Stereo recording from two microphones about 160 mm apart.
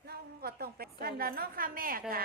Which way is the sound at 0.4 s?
75° right (ahead or behind).